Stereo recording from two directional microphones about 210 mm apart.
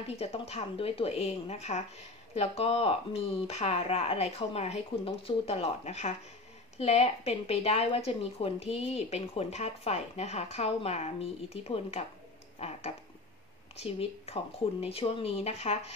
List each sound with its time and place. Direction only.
0.0 s a woman's voice: 30° left (ahead or behind)
12.5 s a sound: 30° left (ahead or behind)
13.7 s a woman's voice: 30° left (ahead or behind)